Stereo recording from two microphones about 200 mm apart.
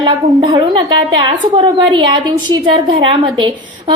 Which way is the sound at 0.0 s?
25° right (ahead or behind).